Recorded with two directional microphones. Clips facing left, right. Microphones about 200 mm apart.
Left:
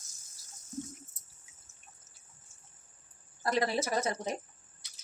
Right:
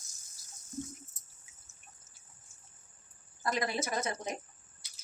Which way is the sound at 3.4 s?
35° left (ahead or behind).